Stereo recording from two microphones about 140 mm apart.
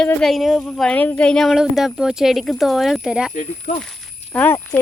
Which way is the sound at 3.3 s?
60° left (ahead or behind).